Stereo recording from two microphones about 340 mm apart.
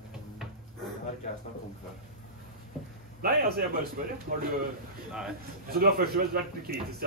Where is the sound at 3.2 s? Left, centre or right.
Right.